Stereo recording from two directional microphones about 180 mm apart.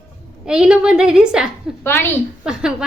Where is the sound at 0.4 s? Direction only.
5° right (ahead or behind).